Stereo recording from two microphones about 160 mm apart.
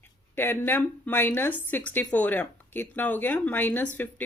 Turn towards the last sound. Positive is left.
turn(degrees=10)  # may be behind; listen again after turning